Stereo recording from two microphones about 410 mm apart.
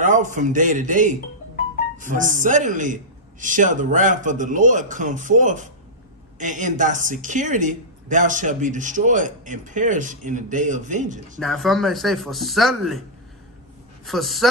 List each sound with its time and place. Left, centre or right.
0.0 s a man's voice: centre
11.3 s speech: centre
14.0 s speech: centre